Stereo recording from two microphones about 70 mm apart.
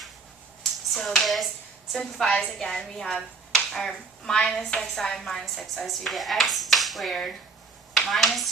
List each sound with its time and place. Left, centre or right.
0.6 s a sound: centre
1.9 s speech: centre
2.3 s a woman's voice: centre
2.6 s speech: centre